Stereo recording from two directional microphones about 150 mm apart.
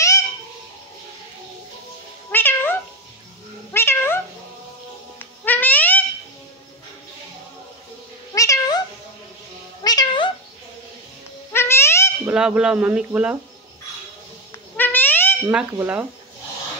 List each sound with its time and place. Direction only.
2.3 s cat: 15° left (ahead or behind)
5.2 s a sound: 10° left (ahead or behind)
8.4 s cat: 25° left (ahead or behind)
9.8 s cat: 30° left (ahead or behind)
11.5 s babbling: 15° left (ahead or behind)
12.3 s speech: 5° right (ahead or behind)
14.8 s cat: 15° left (ahead or behind)
15.4 s speech: 10° right (ahead or behind)